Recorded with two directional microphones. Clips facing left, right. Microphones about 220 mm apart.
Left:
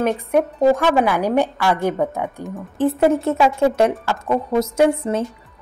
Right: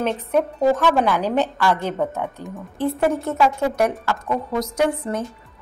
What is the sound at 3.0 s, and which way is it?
A woman's voice, 20° left (ahead or behind).